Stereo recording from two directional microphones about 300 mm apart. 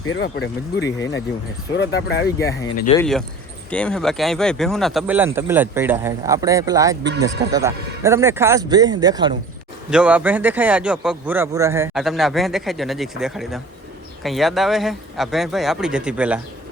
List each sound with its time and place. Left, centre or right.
0.0 s speech: left
2.9 s speech: centre
7.0 s speech: right
7.5 s speech: centre